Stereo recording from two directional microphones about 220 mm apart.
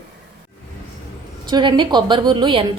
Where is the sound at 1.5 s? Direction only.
20° right (ahead or behind).